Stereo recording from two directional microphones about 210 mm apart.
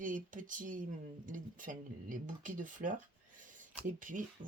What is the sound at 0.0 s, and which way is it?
Speech, 40° right (ahead or behind).